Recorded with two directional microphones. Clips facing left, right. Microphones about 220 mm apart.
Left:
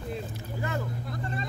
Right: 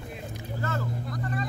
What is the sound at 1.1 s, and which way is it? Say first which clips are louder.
Vehicle: right 3 dB; 25° left (ahead or behind).